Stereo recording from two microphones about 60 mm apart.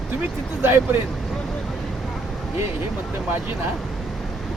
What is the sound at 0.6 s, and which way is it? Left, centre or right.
Speech, right.